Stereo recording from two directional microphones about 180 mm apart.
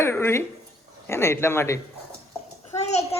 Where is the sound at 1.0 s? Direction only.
15° left (ahead or behind).